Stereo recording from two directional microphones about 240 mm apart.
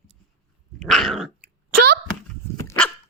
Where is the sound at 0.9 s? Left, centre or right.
Centre.